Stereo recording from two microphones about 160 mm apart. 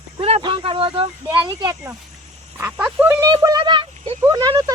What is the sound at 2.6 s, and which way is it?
Speech, 10° right (ahead or behind).